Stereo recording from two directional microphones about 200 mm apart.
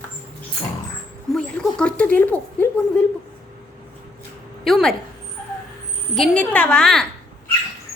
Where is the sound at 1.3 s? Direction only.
5° left (ahead or behind).